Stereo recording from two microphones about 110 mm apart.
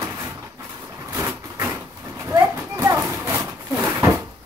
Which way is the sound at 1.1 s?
25° right (ahead or behind).